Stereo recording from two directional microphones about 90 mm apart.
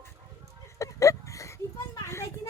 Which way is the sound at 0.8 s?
35° left (ahead or behind).